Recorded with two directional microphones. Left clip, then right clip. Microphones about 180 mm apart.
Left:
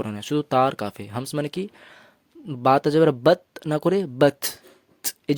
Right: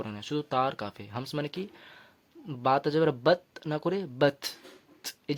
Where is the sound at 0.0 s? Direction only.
40° left (ahead or behind).